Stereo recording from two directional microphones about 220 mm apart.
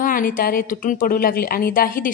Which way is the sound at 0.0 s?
40° left (ahead or behind).